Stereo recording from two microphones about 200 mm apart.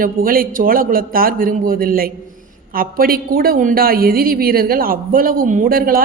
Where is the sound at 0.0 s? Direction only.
45° right (ahead or behind).